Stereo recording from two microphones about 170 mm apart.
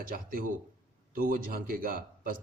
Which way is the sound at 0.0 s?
55° right (ahead or behind).